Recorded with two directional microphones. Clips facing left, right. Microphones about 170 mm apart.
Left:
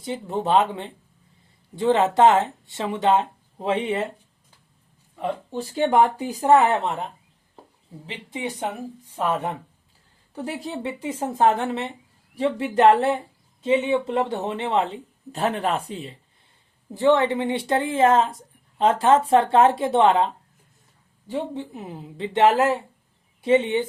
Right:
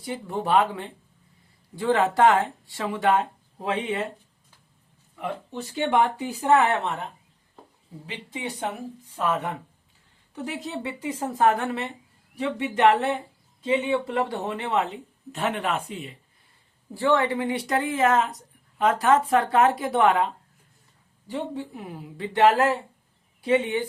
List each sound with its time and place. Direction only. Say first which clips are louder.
0.0 s speech: left 3 dB; 20° left (ahead or behind)
5.1 s speech: left 4 dB; 35° left (ahead or behind)
9.1 s speech: left 2 dB; 25° left (ahead or behind)
16.9 s speech: left 4 dB; 20° left (ahead or behind)
21.2 s speech: left 2 dB; 20° left (ahead or behind)